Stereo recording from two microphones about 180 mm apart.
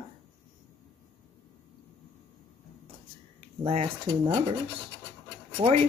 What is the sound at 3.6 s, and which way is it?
Speech, 35° right (ahead or behind).